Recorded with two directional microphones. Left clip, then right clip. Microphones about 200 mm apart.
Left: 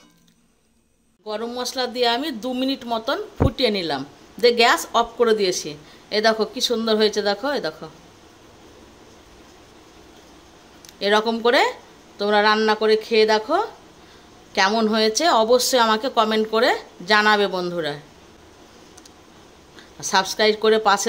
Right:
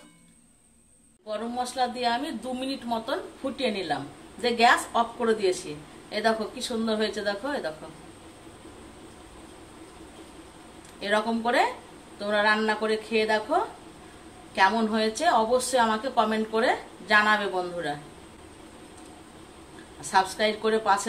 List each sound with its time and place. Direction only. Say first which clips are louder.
1.2 s speech: left 4 dB; 55° left (ahead or behind)
11.0 s speech: left 7 dB; 55° left (ahead or behind)
20.0 s speech: left 4 dB; 55° left (ahead or behind)